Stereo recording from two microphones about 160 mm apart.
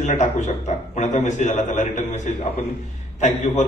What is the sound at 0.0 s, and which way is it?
A man's voice, 50° left (ahead or behind).